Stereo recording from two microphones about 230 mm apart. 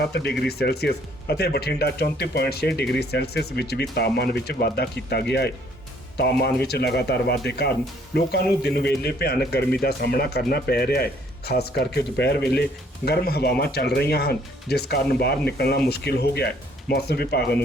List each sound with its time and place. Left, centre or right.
0.0 s speech: left